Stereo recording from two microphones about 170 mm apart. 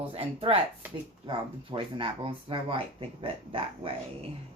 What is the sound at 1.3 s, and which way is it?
Speech, 30° right (ahead or behind).